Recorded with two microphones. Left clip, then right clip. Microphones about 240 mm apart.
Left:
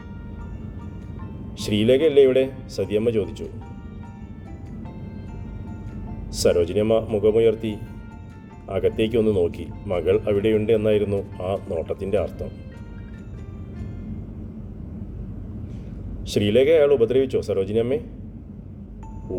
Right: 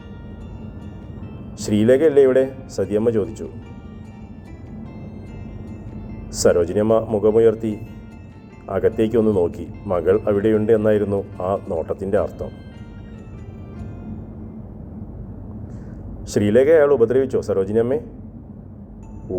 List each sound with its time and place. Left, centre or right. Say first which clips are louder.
1.8 s speech: right 2 dB; centre
6.3 s speech: right 3 dB; centre
16.5 s speech: right 3 dB; centre